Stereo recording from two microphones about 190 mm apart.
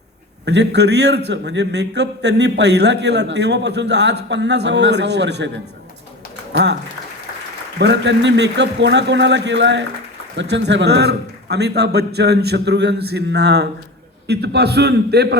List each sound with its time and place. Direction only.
0.4 s a man's voice: 65° right (ahead or behind)
6.5 s speech: 65° right (ahead or behind)
7.8 s a man's voice: 65° right (ahead or behind)